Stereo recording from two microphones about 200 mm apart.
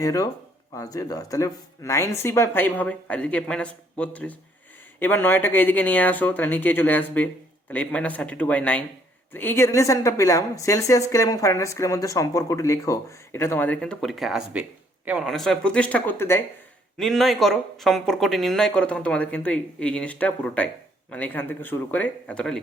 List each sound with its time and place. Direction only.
0.0 s a woman's voice: 15° left (ahead or behind)
17.0 s a woman's voice: centre (ahead or behind)